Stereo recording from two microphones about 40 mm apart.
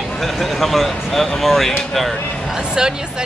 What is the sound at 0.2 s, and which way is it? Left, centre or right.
Speech, centre.